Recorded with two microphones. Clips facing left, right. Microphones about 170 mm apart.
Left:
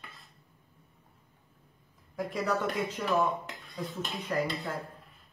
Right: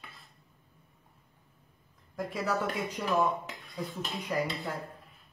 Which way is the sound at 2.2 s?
Centre (ahead or behind).